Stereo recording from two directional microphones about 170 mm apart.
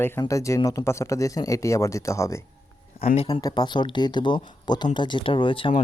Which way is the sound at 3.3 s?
25° left (ahead or behind).